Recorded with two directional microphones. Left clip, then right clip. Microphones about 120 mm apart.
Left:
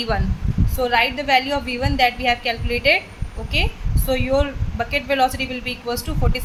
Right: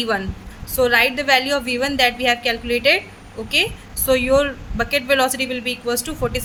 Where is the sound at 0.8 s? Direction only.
60° right (ahead or behind); by 3.0 s 40° right (ahead or behind).